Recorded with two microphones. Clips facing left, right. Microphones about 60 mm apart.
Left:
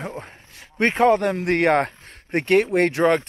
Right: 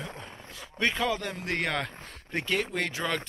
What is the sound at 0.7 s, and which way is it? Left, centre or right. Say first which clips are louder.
Speech: left 11 dB; left.